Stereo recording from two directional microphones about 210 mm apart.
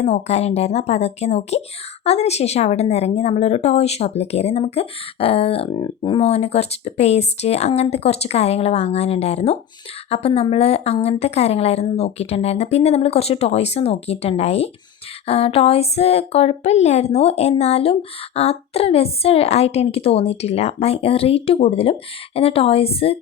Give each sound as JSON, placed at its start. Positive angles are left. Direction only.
{"t": 0.0, "sound": "speech", "side_deg": 30}